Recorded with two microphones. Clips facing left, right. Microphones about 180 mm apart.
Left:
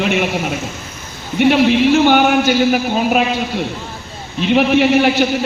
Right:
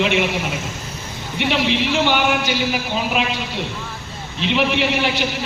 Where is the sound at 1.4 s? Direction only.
45° left (ahead or behind).